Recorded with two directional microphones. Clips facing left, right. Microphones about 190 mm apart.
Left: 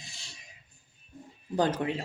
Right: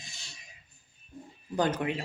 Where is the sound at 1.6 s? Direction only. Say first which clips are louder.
Left 1 dB; 30° left (ahead or behind).